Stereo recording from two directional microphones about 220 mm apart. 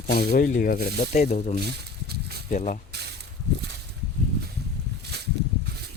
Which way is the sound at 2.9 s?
50° right (ahead or behind).